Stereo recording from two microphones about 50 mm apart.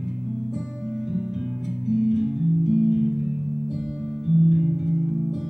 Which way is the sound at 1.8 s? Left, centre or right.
Centre.